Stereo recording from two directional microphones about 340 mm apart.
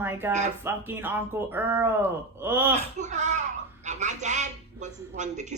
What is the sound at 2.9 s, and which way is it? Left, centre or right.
A woman's voice, right.